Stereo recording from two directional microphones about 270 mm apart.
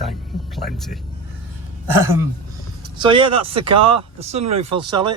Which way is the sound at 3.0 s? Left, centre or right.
Centre.